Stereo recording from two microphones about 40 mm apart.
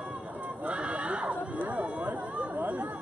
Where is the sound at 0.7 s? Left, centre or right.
Right.